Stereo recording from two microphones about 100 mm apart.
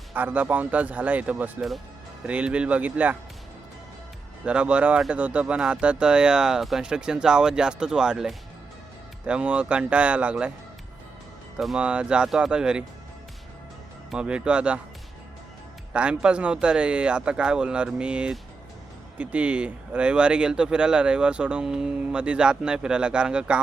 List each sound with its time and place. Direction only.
0.1 s speech: 15° right (ahead or behind)
4.4 s speech: 10° right (ahead or behind)
11.6 s speech: 5° right (ahead or behind)
14.1 s speech: 10° right (ahead or behind)
15.9 s speech: 10° right (ahead or behind)